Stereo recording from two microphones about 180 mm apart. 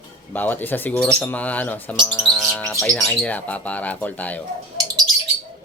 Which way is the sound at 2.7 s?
5° left (ahead or behind).